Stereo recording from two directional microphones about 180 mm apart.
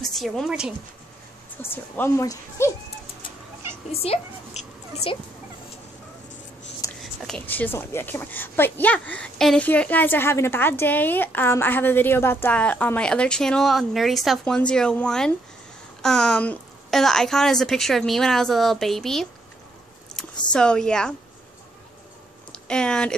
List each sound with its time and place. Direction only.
0.0 s a woman's voice: centre (ahead or behind)
1.6 s a woman's voice: 10° left (ahead or behind)
3.9 s speech: 35° left (ahead or behind)
7.0 s a woman's voice: centre (ahead or behind)
20.5 s a woman's voice: 5° left (ahead or behind)
22.5 s speech: 5° left (ahead or behind)